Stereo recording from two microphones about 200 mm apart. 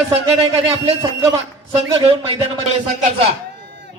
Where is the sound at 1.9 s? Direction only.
30° right (ahead or behind).